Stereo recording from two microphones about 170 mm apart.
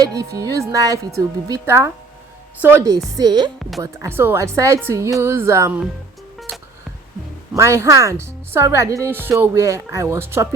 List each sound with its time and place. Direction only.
0.0 s a woman's voice: 20° right (ahead or behind)
7.5 s speech: 15° right (ahead or behind)